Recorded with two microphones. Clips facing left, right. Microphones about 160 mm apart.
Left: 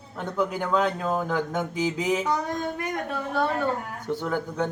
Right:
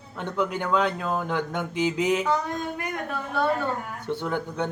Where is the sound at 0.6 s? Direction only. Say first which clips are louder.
Even; 40° left (ahead or behind).